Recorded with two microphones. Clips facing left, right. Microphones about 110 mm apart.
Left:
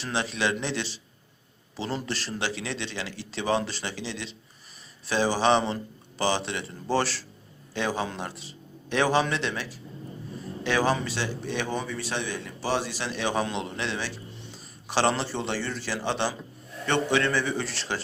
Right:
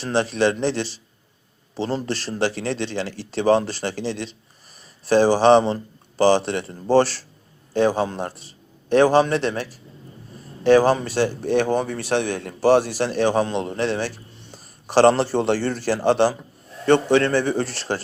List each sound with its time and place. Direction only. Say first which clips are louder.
0.0 s a man's voice: right 8 dB; 40° right (ahead or behind)